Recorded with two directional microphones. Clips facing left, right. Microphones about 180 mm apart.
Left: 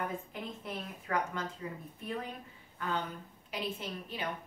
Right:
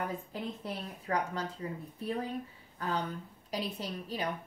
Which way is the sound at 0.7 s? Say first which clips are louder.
Even; 35° right (ahead or behind).